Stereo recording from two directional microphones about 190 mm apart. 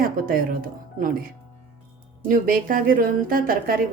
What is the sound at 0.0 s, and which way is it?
Speech, 45° right (ahead or behind).